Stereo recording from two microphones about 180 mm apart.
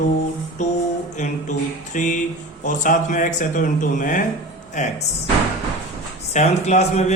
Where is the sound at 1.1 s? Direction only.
40° left (ahead or behind).